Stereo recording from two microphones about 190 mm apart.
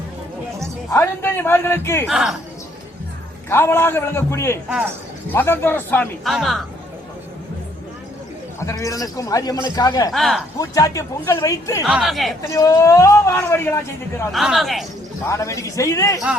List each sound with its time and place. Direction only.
0.9 s a man's voice: 10° left (ahead or behind)
2.0 s speech: centre (ahead or behind)
3.5 s a man's voice: 15° left (ahead or behind)
8.6 s a man's voice: 15° left (ahead or behind)
10.1 s speech: centre (ahead or behind)
10.6 s a man's voice: 15° left (ahead or behind)
11.9 s speech: centre (ahead or behind)
12.4 s a man's voice: 20° left (ahead or behind)
14.3 s speech: centre (ahead or behind)
15.3 s a man's voice: 15° left (ahead or behind)